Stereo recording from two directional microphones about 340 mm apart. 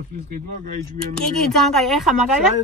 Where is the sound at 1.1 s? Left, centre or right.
Centre.